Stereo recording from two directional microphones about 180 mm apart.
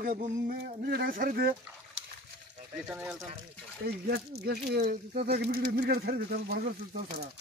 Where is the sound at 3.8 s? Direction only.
60° right (ahead or behind).